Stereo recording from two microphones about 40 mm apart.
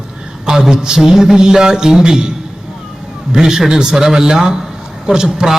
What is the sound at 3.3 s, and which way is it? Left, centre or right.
A man's voice, centre.